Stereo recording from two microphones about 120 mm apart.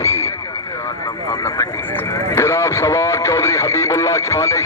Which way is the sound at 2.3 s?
20° left (ahead or behind).